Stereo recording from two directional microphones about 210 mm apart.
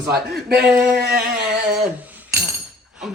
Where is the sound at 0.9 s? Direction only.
50° right (ahead or behind).